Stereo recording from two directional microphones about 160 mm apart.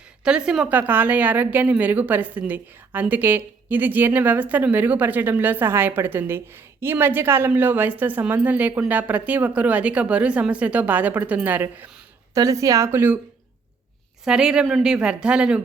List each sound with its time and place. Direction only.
0.3 s a woman's voice: 5° right (ahead or behind)
14.3 s speech: 5° right (ahead or behind)